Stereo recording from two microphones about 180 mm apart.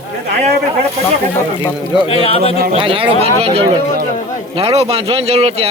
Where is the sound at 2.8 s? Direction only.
30° right (ahead or behind).